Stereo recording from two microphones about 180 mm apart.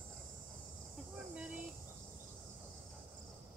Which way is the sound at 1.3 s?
5° right (ahead or behind).